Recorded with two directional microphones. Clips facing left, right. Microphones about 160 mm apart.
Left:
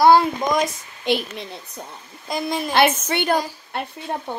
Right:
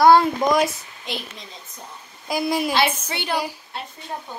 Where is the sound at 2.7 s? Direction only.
55° left (ahead or behind).